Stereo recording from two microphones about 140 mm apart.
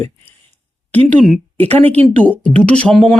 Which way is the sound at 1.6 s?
50° right (ahead or behind).